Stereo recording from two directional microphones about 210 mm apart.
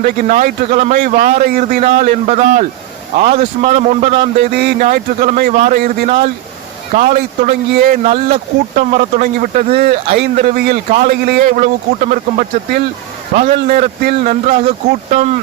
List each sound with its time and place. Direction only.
0.0 s a man's voice: 40° right (ahead or behind)
4.5 s a man's voice: 45° right (ahead or behind)
6.1 s a man's voice: 35° right (ahead or behind)
8.0 s a man's voice: 30° right (ahead or behind)